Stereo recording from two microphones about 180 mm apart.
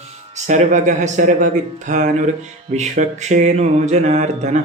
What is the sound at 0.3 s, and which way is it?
Music, 40° right (ahead or behind).